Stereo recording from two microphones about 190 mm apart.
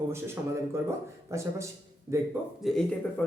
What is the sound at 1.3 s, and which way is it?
Speech, 15° right (ahead or behind).